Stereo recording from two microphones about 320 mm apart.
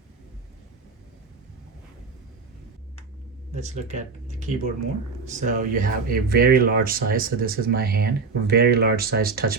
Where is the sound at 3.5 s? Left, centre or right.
Right.